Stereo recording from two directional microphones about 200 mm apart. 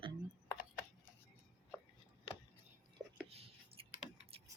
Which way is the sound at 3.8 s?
25° right (ahead or behind).